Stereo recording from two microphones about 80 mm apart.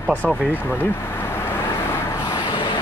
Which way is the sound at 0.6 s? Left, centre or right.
Left.